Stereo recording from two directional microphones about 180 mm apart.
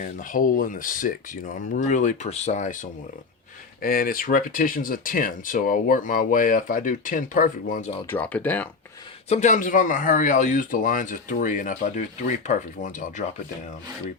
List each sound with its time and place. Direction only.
0.0 s speech: 50° left (ahead or behind)
8.0 s speech: 10° left (ahead or behind)
9.3 s speech: 40° left (ahead or behind)